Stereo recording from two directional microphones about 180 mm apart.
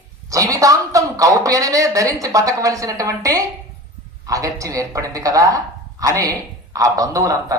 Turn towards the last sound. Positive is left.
turn(degrees=-20)  # may be behind; listen again after turning